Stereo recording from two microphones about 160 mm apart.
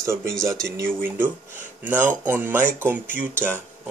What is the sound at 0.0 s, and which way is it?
Speech, 15° right (ahead or behind).